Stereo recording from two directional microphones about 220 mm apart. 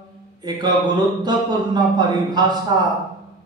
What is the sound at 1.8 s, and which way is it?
Speech, 20° right (ahead or behind).